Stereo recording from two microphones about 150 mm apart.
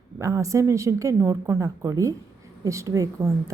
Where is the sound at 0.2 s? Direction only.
20° right (ahead or behind).